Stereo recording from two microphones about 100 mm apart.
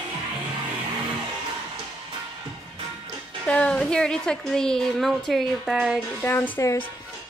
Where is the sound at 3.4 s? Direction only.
10° left (ahead or behind); by 6.0 s 5° right (ahead or behind).